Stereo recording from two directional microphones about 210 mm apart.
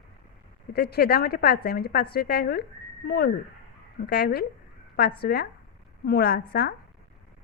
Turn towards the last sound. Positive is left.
turn(degrees=50)  # may be behind; listen again after turning